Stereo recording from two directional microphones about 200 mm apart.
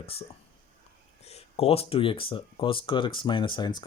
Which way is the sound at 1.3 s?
30° left (ahead or behind).